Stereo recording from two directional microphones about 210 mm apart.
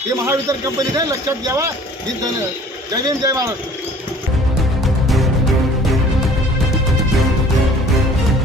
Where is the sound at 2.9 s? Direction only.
15° right (ahead or behind).